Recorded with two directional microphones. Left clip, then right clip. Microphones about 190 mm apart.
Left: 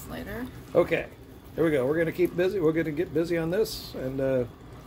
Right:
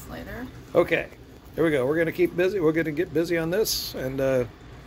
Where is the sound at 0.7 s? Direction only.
10° right (ahead or behind).